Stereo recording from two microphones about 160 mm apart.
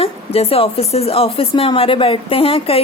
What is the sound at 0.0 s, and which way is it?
A woman's voice, 35° left (ahead or behind).